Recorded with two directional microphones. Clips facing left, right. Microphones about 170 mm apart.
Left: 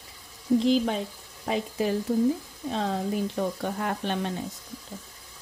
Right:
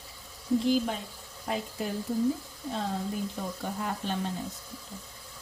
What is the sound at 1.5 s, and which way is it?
Speech, 90° left.